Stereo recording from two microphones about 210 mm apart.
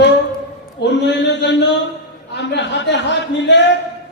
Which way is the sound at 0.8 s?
55° left (ahead or behind).